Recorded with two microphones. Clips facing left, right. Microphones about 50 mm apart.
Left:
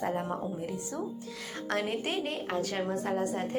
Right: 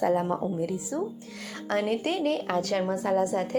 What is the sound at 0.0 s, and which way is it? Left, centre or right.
Speech, right.